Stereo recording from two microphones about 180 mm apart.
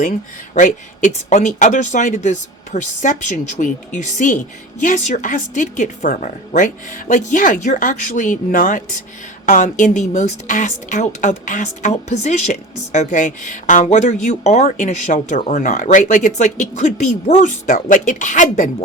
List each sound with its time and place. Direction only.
0.0 s a woman's voice: 45° left (ahead or behind)